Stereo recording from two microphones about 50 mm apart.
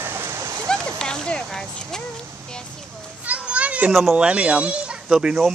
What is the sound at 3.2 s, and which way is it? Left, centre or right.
Children playing, right.